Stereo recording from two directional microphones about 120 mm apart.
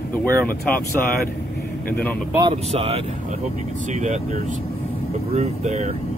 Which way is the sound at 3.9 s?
70° right (ahead or behind).